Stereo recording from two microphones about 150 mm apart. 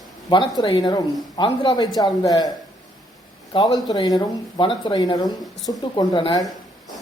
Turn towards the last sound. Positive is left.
turn(degrees=30)  # may be behind; listen again after turning